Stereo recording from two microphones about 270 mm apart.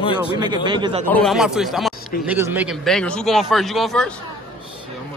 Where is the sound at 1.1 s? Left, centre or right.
Centre.